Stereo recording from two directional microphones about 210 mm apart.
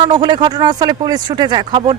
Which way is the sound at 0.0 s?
20° right (ahead or behind).